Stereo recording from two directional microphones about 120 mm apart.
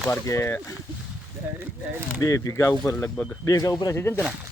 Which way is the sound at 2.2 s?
30° left (ahead or behind).